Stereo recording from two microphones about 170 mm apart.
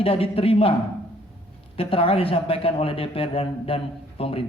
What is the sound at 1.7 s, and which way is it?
Speech, 35° left (ahead or behind).